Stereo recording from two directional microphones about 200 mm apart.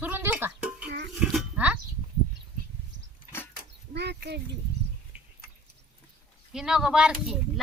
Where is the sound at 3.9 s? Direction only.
55° right (ahead or behind).